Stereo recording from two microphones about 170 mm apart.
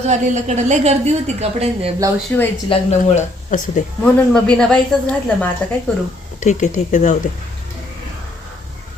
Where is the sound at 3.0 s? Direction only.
45° left (ahead or behind).